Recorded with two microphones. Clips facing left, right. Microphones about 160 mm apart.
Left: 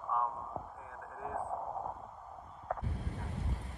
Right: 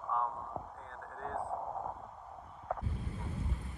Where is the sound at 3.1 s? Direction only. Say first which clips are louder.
Right 1 dB; 75° left (ahead or behind).